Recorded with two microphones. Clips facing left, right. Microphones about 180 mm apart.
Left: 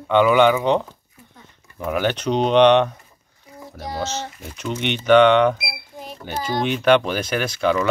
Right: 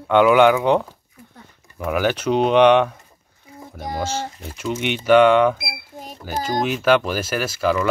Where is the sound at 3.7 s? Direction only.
50° right (ahead or behind).